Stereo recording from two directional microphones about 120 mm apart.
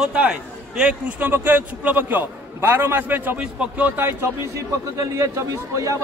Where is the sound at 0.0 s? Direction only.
10° right (ahead or behind).